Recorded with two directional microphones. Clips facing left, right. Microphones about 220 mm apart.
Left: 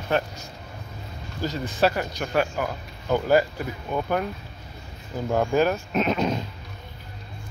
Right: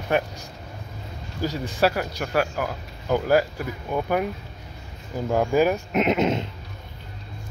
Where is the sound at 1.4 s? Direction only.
10° right (ahead or behind).